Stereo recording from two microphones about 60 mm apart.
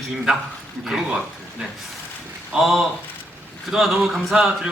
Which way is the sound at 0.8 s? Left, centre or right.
Centre.